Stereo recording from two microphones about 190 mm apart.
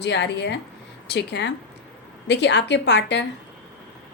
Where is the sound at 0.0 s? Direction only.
65° left (ahead or behind).